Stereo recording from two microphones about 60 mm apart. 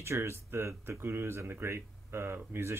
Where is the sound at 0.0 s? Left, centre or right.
Right.